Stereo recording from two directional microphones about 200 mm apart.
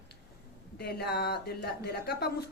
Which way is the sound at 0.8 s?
55° left (ahead or behind).